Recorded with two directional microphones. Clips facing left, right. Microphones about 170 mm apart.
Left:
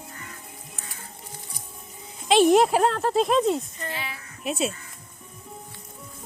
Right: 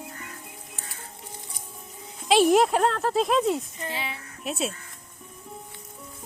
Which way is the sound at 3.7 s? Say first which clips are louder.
Right 1 dB; 20° right (ahead or behind).